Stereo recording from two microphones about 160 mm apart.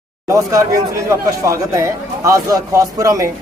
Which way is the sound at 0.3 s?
20° right (ahead or behind).